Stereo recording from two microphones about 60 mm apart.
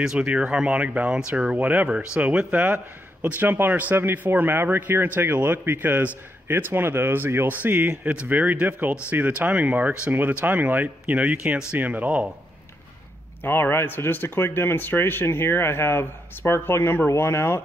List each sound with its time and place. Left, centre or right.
0.0 s speech: centre
1.6 s speech: right
13.4 s speech: left